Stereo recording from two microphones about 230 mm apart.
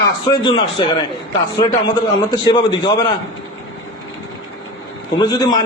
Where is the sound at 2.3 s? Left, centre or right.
Centre.